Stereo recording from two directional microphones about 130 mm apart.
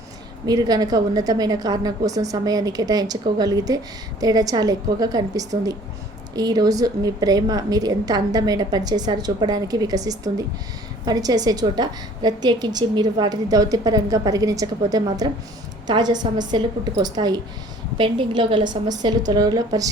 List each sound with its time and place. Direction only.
0.4 s a woman's voice: 30° right (ahead or behind)